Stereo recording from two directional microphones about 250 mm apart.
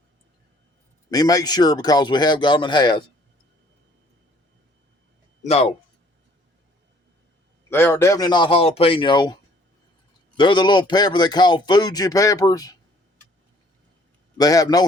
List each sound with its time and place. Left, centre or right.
1.1 s a man's voice: centre
5.4 s speech: left
7.7 s a man's voice: centre
14.3 s a man's voice: centre